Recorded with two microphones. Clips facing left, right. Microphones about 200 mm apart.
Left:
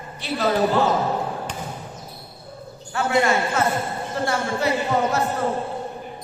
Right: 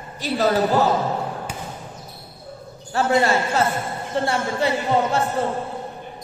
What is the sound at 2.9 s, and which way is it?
A man's voice, 35° right (ahead or behind).